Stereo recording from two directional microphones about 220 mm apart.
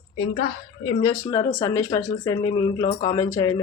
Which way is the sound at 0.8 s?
15° left (ahead or behind).